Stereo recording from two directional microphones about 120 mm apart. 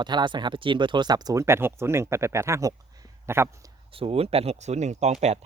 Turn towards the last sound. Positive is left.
turn(degrees=-60)  # may be behind; listen again after turning